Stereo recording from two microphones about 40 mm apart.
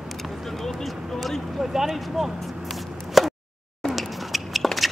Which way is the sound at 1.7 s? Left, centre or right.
Centre.